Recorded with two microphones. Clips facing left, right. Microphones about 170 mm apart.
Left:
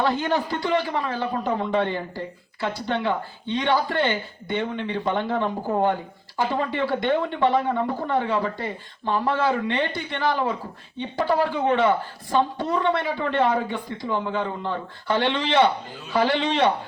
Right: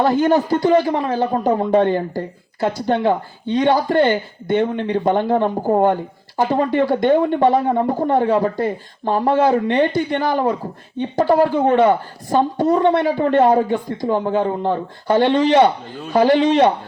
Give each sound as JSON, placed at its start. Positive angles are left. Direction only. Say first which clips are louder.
{"t": 0.0, "sound": "speech", "louder": "right 8 dB", "side_deg": -45}